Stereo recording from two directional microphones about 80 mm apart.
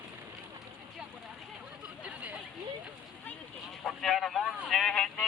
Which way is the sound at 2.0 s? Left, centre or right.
Centre.